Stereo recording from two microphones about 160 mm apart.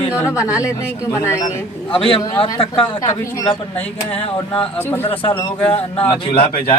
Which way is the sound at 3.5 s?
40° left (ahead or behind).